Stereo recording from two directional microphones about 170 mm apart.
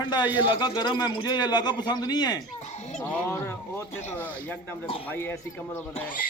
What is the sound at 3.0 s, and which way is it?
Speech, 15° left (ahead or behind).